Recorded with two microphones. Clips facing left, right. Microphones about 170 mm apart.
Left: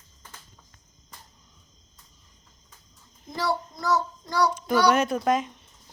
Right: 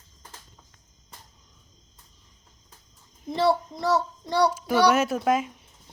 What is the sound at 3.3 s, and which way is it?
Child singing, 30° right (ahead or behind).